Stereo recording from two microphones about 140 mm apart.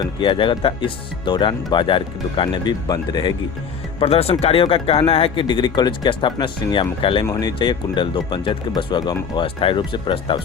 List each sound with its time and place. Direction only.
0.0 s speech: 40° left (ahead or behind)
4.0 s speech: 45° left (ahead or behind)
7.3 s speech: 30° left (ahead or behind)